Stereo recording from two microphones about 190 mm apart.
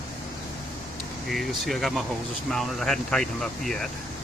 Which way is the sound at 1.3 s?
Centre (ahead or behind).